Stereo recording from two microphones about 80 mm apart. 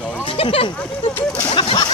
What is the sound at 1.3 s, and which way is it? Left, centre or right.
Speech, left.